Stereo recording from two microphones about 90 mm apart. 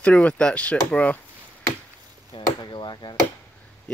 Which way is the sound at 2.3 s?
60° left (ahead or behind).